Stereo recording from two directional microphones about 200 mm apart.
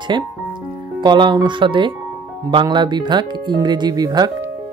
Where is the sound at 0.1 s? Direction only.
20° right (ahead or behind).